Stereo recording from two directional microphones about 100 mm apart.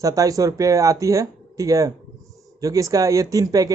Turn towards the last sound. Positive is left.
turn(degrees=-35)  # may be behind; listen again after turning